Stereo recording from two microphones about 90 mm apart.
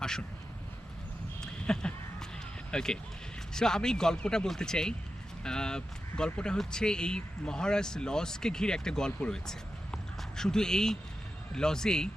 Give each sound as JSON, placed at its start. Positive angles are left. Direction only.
{"t": 0.0, "sound": "speech", "side_deg": 5}
{"t": 1.4, "sound": "a sound", "side_deg": 10}
{"t": 2.7, "sound": "speech", "side_deg": 10}